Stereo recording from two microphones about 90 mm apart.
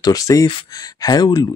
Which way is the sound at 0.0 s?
40° left (ahead or behind).